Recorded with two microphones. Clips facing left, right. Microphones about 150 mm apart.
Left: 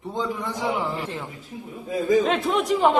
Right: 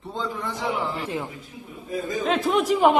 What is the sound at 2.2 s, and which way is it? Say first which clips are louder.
Speech: right 1 dB; centre (ahead or behind).